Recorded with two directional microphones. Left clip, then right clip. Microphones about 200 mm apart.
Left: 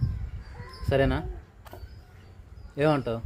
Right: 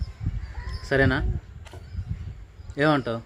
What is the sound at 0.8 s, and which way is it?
Speech, 15° right (ahead or behind).